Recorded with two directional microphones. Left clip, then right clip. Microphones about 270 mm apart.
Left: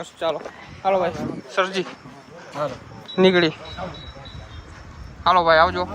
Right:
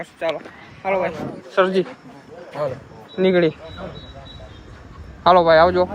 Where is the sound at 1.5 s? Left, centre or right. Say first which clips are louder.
Right 5 dB; centre.